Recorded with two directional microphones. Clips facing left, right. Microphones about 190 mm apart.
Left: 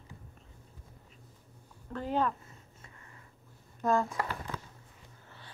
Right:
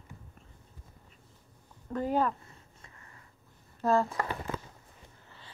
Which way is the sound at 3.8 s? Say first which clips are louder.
Right 2 dB; centre (ahead or behind).